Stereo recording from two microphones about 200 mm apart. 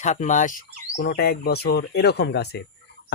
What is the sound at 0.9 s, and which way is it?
Speech, 55° left (ahead or behind).